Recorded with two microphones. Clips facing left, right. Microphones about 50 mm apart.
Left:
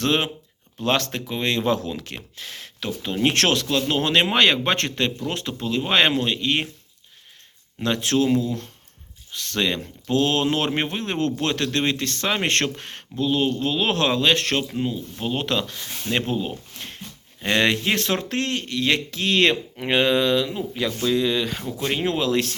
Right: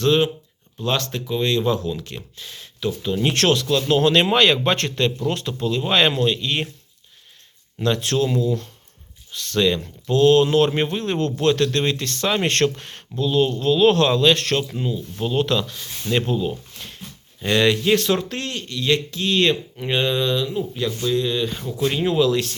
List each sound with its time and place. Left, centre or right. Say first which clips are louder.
0.0 s speech: right 4 dB; left
3.2 s speech: right 1 dB; left
3.7 s speech: right 4 dB; left
7.8 s speech: right 1 dB; left
9.3 s speech: right 4 dB; left
21.9 s speech: right 3 dB; left